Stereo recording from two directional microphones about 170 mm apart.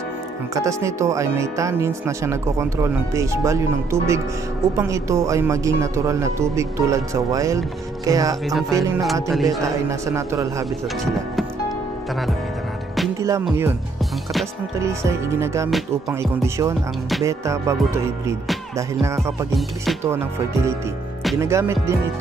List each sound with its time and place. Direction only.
0.6 s speech: 20° right (ahead or behind)
9.3 s a man's voice: centre (ahead or behind)
9.6 s speech: 20° right (ahead or behind)
13.2 s speech: 15° right (ahead or behind)
14.8 s speech: 15° right (ahead or behind)
21.4 s speech: 15° right (ahead or behind)